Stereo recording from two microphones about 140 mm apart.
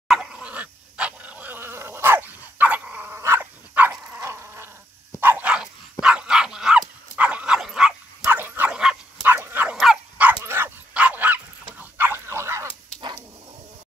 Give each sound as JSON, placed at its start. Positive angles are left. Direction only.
{"t": 0.1, "sound": "dog", "side_deg": -5}